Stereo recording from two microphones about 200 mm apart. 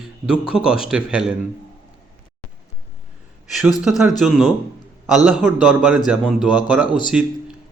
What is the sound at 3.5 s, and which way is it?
A man's voice, centre (ahead or behind).